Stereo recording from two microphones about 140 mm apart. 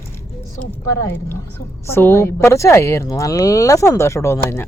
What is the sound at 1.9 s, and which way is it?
Speech, 15° left (ahead or behind).